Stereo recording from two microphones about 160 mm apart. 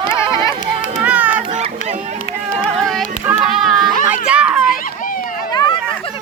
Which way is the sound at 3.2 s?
5° right (ahead or behind).